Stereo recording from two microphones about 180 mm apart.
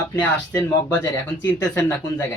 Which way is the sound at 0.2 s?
10° left (ahead or behind).